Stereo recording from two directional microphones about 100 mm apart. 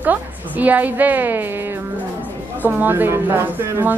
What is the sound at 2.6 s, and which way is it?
Speech, 20° right (ahead or behind).